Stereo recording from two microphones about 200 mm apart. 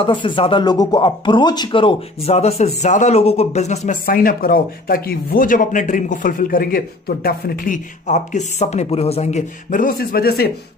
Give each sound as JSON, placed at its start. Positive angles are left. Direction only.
{"t": 0.0, "sound": "speech", "side_deg": 25}